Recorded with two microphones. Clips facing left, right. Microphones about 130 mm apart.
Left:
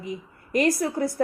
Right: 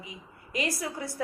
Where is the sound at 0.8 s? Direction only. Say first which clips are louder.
Left 9 dB; 40° left (ahead or behind).